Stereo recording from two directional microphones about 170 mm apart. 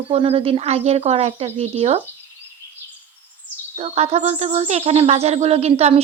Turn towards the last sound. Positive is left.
turn(degrees=-35)  # may be behind; listen again after turning